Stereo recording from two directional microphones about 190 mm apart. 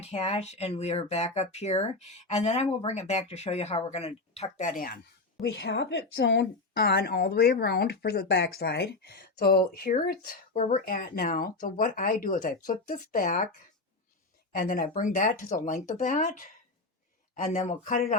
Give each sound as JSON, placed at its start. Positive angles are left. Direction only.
{"t": 0.0, "sound": "speech", "side_deg": 35}
{"t": 10.2, "sound": "speech", "side_deg": 40}
{"t": 14.5, "sound": "speech", "side_deg": 45}